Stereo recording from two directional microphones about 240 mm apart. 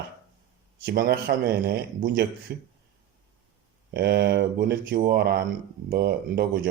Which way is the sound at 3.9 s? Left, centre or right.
Right.